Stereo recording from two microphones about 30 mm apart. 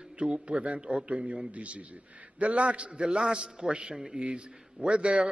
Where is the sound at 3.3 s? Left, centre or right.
Right.